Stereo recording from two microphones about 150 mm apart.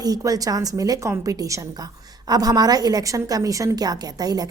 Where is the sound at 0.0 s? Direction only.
25° right (ahead or behind).